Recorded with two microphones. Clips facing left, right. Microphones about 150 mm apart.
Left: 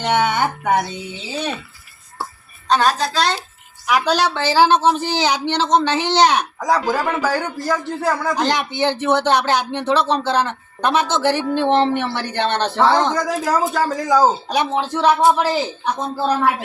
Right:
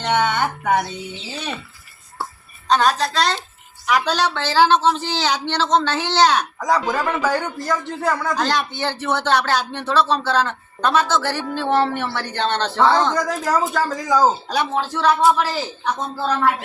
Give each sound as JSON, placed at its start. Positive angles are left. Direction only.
{"t": 0.0, "sound": "a woman's voice", "side_deg": 10}
{"t": 2.6, "sound": "a woman's voice", "side_deg": 0}
{"t": 8.4, "sound": "a woman's voice", "side_deg": 15}
{"t": 14.4, "sound": "a woman's voice", "side_deg": 20}